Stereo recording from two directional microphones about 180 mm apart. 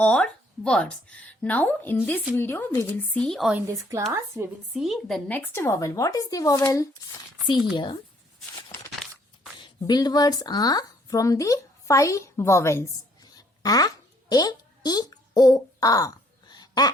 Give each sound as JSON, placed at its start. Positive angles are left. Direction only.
{"t": 0.0, "sound": "speech", "side_deg": 5}
{"t": 3.7, "sound": "a woman's voice", "side_deg": -15}
{"t": 4.7, "sound": "speech", "side_deg": 0}
{"t": 9.6, "sound": "speech", "side_deg": 20}
{"t": 13.3, "sound": "a sound", "side_deg": 20}